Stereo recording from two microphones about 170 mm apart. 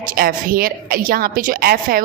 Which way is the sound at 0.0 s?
55° right (ahead or behind).